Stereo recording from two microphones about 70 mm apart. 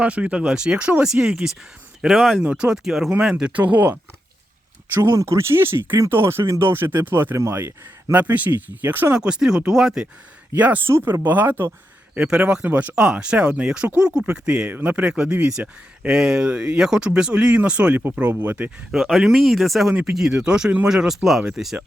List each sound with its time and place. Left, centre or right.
0.0 s speech: centre
2.4 s speech: centre
3.5 s speech: right
5.2 s a man's voice: right
8.1 s speech: right
9.1 s speech: centre
10.5 s speech: right
10.8 s speech: right
12.1 s speech: centre
14.7 s speech: right
15.0 s speech: centre
18.9 s speech: centre
19.9 s speech: centre